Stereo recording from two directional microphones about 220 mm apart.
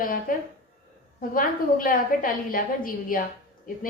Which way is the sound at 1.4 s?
40° left (ahead or behind).